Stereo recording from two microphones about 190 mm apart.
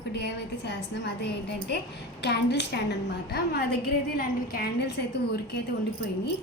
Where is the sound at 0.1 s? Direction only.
65° left (ahead or behind).